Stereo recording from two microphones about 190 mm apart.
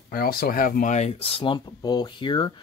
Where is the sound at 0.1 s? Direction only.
50° left (ahead or behind).